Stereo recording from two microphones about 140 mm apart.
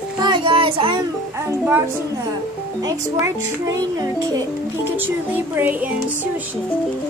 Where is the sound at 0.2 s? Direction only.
35° right (ahead or behind).